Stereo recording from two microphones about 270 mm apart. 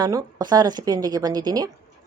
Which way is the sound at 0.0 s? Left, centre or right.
Centre.